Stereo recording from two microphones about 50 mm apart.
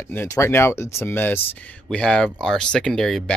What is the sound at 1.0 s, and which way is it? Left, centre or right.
Speech, left.